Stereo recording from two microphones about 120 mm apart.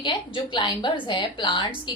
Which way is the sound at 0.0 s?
40° left (ahead or behind).